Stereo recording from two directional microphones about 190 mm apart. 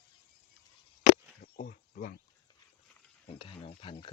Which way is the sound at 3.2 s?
30° left (ahead or behind).